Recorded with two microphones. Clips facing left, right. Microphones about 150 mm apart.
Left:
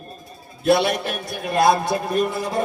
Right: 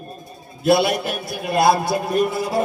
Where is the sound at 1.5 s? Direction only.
5° right (ahead or behind).